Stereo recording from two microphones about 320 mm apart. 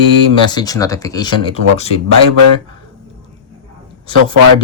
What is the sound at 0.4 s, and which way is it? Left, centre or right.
Speech, centre.